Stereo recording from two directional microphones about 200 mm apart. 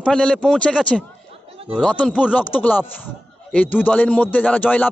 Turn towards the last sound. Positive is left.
turn(degrees=5)  # may be behind; listen again after turning